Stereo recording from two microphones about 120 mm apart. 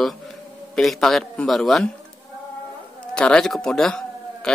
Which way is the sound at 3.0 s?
5° left (ahead or behind).